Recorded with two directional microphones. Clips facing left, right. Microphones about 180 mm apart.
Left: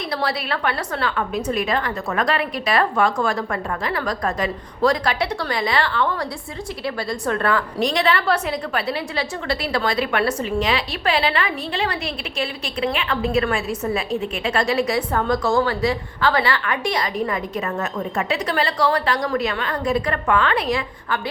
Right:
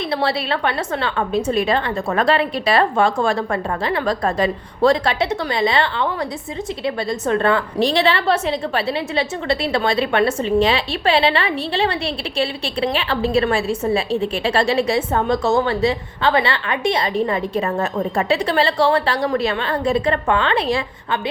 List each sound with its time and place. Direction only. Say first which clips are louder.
0.1 s a woman's voice: right 3 dB; 25° right (ahead or behind)